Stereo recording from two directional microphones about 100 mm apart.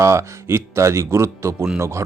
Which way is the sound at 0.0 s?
30° right (ahead or behind).